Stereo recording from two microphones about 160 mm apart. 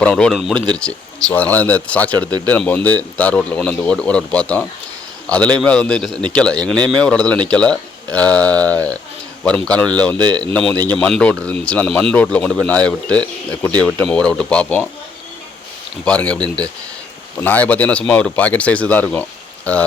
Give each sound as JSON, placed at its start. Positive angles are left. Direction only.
{"t": 0.0, "sound": "speech", "side_deg": 5}
{"t": 10.2, "sound": "speech", "side_deg": -25}
{"t": 10.4, "sound": "speech", "side_deg": 5}
{"t": 16.0, "sound": "speech", "side_deg": 5}